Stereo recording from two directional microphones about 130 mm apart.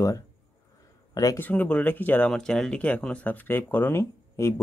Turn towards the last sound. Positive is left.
turn(degrees=20)  # may be behind; listen again after turning